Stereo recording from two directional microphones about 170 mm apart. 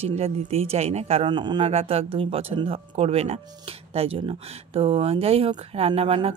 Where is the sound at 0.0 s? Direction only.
35° right (ahead or behind).